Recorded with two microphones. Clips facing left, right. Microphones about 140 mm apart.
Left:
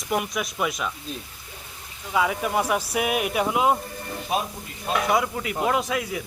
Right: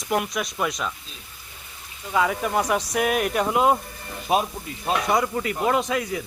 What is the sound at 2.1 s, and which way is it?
Speech, 5° left (ahead or behind).